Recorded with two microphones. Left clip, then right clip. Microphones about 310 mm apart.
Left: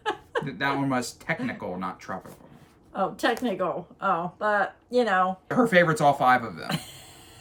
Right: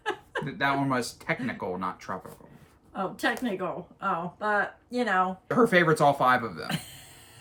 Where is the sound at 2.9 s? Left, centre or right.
Centre.